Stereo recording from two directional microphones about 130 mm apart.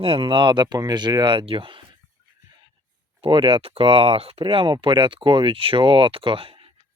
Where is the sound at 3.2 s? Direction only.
40° right (ahead or behind).